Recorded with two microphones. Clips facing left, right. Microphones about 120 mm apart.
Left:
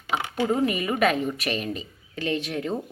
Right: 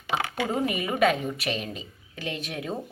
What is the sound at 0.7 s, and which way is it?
A woman's voice, 15° right (ahead or behind).